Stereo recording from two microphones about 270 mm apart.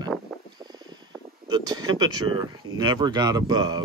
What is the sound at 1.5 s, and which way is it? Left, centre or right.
Speech, centre.